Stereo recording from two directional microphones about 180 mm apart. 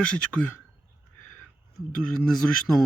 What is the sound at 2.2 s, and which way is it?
Speech, centre (ahead or behind).